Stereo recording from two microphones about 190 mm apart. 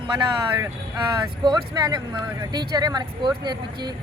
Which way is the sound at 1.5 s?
20° right (ahead or behind).